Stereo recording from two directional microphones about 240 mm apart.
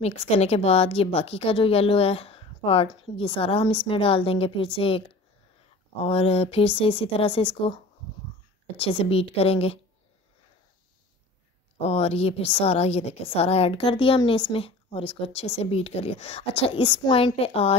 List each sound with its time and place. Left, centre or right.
0.0 s speech: left
6.0 s speech: left
11.8 s speech: left